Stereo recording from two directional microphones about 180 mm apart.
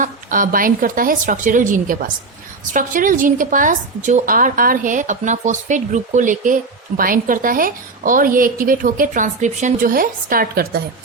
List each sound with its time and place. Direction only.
0.0 s a woman's voice: 45° right (ahead or behind)